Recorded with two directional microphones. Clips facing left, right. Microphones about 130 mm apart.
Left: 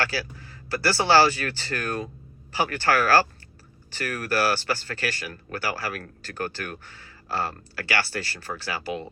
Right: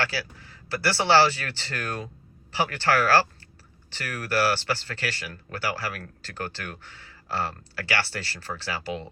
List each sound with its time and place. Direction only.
0.0 s speech: 25° right (ahead or behind)